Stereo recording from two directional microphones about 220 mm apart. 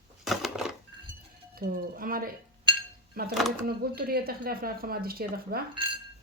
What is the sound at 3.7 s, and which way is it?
Speech, 45° right (ahead or behind).